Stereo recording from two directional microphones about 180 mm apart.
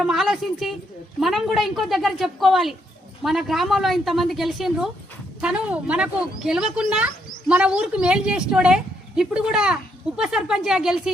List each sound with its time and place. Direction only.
0.0 s speech: centre (ahead or behind)